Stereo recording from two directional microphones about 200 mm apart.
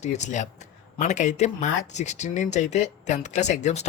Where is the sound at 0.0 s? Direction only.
35° left (ahead or behind).